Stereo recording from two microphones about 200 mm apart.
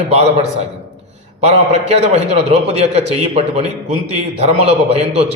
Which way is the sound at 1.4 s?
30° right (ahead or behind).